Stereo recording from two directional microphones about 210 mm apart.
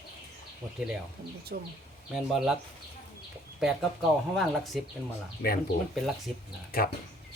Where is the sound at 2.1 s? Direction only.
5° right (ahead or behind).